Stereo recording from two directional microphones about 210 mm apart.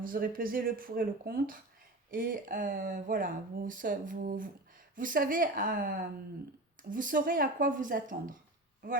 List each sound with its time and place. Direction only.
0.0 s speech: 40° right (ahead or behind)